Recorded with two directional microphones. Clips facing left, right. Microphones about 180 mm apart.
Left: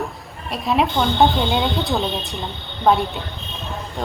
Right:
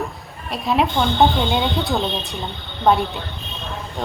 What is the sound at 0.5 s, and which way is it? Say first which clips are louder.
A woman's voice: even; centre (ahead or behind).